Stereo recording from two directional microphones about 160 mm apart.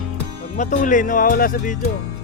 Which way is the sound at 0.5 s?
50° left (ahead or behind).